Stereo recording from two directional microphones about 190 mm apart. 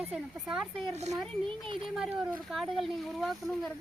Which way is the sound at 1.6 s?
25° right (ahead or behind).